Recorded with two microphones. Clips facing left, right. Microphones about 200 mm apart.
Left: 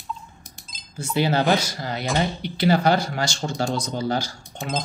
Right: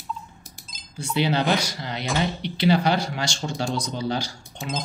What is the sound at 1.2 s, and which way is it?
Speech, 45° left (ahead or behind).